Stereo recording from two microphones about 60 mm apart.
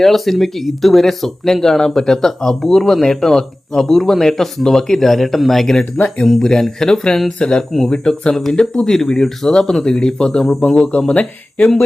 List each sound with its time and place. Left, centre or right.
0.0 s speech: centre; by 11.7 s left